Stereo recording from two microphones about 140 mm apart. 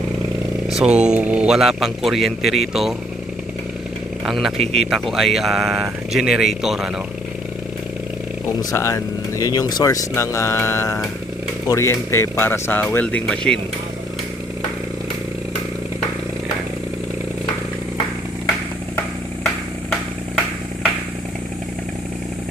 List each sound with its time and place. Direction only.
0.7 s a man's voice: 5° right (ahead or behind)
4.3 s a man's voice: centre (ahead or behind)
8.7 s speech: 20° left (ahead or behind)